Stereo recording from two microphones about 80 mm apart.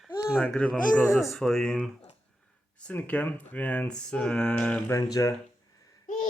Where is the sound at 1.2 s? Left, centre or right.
Centre.